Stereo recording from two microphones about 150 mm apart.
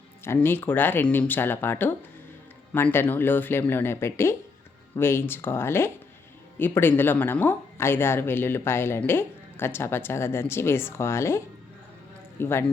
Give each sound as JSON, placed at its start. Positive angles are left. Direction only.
{"t": 0.3, "sound": "speech", "side_deg": 15}